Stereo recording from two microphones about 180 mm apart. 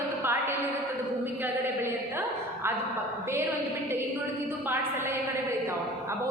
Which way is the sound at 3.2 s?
15° right (ahead or behind).